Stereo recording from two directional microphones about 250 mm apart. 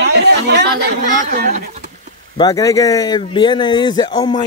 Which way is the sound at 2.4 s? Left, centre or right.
Centre.